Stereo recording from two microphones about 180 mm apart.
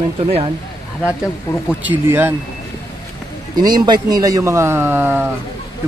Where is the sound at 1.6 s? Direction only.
10° right (ahead or behind).